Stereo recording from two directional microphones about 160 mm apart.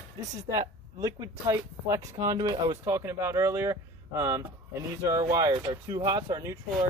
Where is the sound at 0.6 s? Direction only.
20° right (ahead or behind).